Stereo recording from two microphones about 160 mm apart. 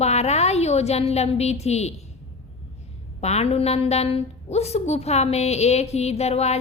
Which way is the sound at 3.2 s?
40° left (ahead or behind).